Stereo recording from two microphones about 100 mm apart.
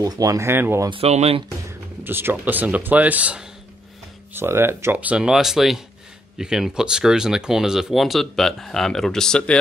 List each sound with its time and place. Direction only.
0.0 s speech: 35° right (ahead or behind)
0.8 s speech: 75° right (ahead or behind)
1.7 s speech: 20° right (ahead or behind); by 9.6 s 5° left (ahead or behind)